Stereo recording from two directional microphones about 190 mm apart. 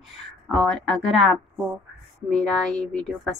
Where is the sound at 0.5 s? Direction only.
5° left (ahead or behind).